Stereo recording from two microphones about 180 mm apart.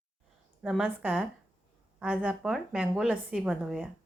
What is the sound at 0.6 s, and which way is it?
A woman's voice, 5° right (ahead or behind).